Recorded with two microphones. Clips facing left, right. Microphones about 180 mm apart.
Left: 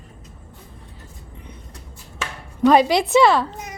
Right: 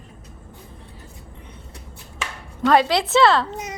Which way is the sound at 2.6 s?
20° left (ahead or behind).